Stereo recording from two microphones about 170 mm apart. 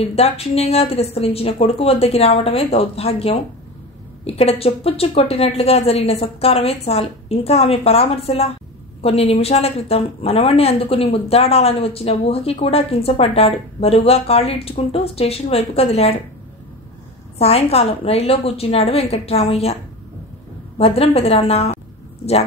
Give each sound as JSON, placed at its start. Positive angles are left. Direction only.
{"t": 0.0, "sound": "speech", "side_deg": 35}
{"t": 17.4, "sound": "speech", "side_deg": 35}
{"t": 20.7, "sound": "speech", "side_deg": 35}